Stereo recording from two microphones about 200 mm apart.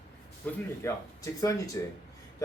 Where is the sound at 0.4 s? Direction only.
15° left (ahead or behind).